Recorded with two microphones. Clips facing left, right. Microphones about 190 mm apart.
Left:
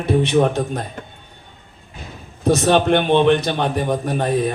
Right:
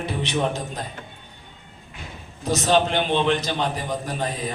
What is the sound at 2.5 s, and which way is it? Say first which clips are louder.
Speech: left 5 dB; 60° left (ahead or behind).